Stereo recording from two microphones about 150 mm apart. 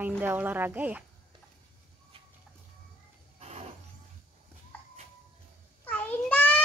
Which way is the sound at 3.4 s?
45° right (ahead or behind).